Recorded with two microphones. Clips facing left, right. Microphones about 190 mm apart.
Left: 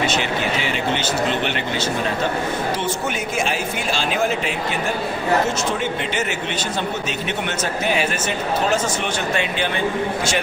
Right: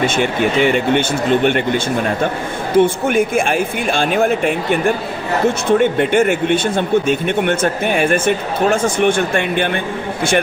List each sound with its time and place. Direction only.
0.0 s speech: 50° right (ahead or behind)